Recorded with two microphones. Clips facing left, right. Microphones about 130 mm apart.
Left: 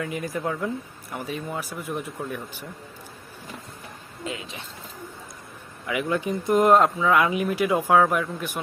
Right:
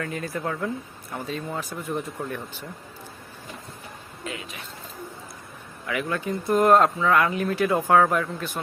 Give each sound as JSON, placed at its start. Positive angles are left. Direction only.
{"t": 0.0, "sound": "speech", "side_deg": 15}
{"t": 4.2, "sound": "speech", "side_deg": 25}
{"t": 5.8, "sound": "speech", "side_deg": 20}